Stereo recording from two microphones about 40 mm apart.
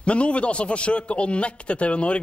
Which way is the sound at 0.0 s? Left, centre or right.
Left.